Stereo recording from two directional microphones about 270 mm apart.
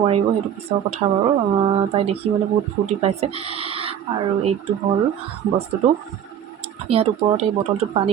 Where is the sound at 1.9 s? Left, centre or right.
Right.